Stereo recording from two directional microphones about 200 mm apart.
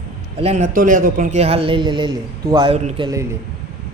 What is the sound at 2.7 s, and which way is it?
Speech, 35° right (ahead or behind).